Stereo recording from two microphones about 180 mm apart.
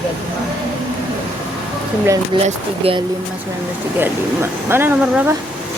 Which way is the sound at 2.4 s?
30° right (ahead or behind).